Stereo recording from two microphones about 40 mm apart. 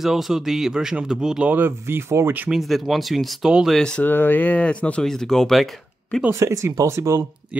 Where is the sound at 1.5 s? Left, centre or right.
Right.